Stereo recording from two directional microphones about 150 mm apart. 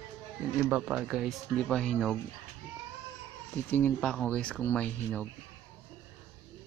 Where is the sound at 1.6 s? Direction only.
5° left (ahead or behind).